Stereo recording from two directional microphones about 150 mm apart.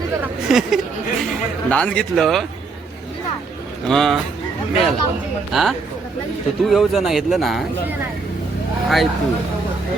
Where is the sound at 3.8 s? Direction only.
Centre (ahead or behind).